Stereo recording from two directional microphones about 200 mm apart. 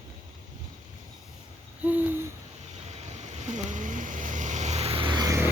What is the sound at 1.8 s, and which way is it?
Hoot, 10° right (ahead or behind).